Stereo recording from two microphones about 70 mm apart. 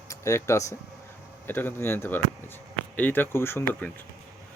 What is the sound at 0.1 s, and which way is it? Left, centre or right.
Speech, left.